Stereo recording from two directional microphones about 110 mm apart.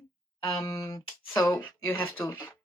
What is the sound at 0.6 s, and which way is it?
Speech, 25° left (ahead or behind).